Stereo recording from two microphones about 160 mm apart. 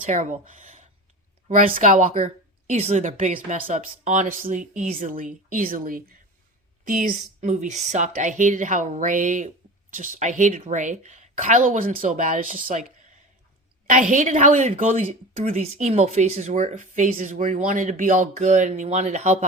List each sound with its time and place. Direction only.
0.0 s a woman's voice: 50° right (ahead or behind)
7.4 s a woman's voice: 50° right (ahead or behind)
13.9 s a woman's voice: 50° right (ahead or behind)